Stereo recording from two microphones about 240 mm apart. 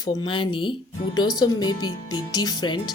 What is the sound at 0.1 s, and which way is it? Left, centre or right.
Speech, left.